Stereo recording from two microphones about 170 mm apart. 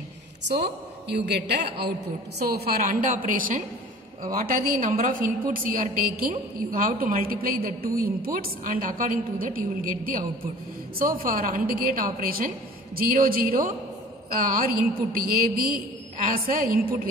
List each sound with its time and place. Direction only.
0.5 s a woman's voice: 75° right (ahead or behind)